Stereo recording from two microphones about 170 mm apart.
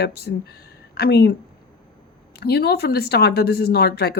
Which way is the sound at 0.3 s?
75° left (ahead or behind).